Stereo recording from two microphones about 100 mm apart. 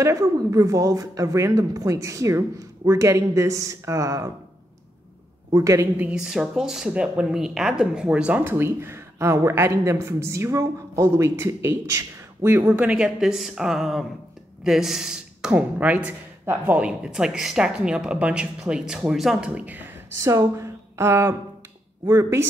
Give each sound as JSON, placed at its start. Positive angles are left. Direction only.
{"t": 0.0, "sound": "speech", "side_deg": -35}
{"t": 5.5, "sound": "speech", "side_deg": -30}
{"t": 5.9, "sound": "speech", "side_deg": -10}
{"t": 12.6, "sound": "speech", "side_deg": -10}
{"t": 15.5, "sound": "speech", "side_deg": -15}
{"t": 20.2, "sound": "speech", "side_deg": -30}